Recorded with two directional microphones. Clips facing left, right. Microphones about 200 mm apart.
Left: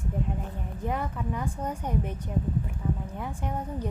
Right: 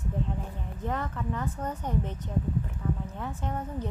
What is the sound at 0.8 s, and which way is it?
A woman's voice, 10° left (ahead or behind).